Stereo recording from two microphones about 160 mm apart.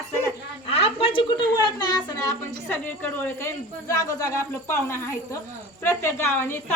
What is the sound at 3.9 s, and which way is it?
A woman's voice, 20° left (ahead or behind).